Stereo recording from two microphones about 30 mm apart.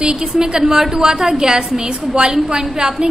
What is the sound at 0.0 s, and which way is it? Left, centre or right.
A woman's voice, right.